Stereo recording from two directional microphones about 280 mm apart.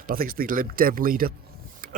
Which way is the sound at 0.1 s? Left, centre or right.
Right.